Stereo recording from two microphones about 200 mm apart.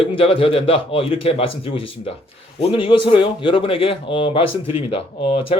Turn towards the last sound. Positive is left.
turn(degrees=30)  # may be behind; listen again after turning